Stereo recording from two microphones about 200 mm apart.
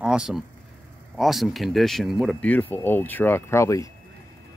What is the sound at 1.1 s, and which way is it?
Speech, centre (ahead or behind).